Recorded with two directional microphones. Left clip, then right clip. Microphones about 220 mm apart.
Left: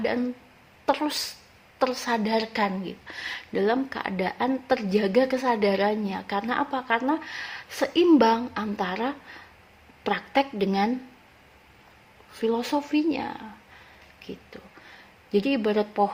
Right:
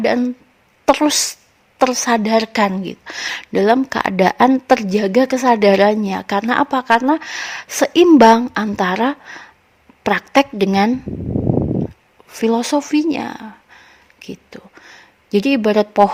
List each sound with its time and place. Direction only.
0.0 s a woman's voice: 45° right (ahead or behind)
12.3 s a woman's voice: 45° right (ahead or behind)
14.2 s a sound: 40° right (ahead or behind)